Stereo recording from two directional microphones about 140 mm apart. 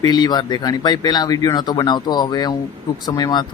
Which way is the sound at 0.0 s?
30° left (ahead or behind).